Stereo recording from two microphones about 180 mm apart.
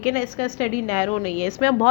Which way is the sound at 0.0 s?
45° left (ahead or behind).